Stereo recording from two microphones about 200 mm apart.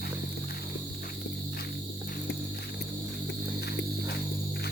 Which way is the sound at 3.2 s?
55° left (ahead or behind).